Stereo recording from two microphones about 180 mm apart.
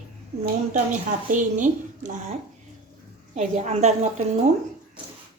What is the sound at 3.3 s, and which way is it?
Speech, 40° right (ahead or behind).